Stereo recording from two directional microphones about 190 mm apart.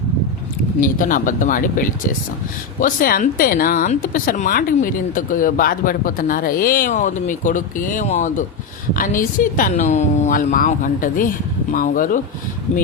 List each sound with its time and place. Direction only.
0.8 s a woman's voice: 45° left (ahead or behind)